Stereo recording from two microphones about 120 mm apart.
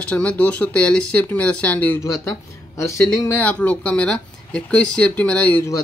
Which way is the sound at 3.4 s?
10° left (ahead or behind).